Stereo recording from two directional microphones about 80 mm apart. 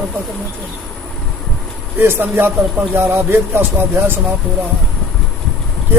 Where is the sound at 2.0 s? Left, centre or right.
Right.